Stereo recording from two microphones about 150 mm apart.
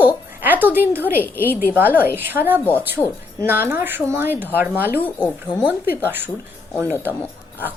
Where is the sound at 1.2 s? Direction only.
15° left (ahead or behind).